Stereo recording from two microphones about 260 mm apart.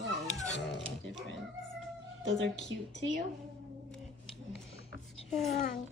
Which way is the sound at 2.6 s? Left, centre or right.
Left.